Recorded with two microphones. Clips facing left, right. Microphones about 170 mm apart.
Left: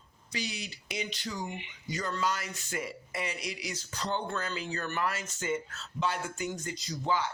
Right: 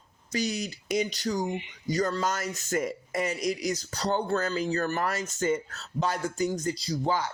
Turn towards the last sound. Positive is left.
turn(degrees=-40)  # may be behind; listen again after turning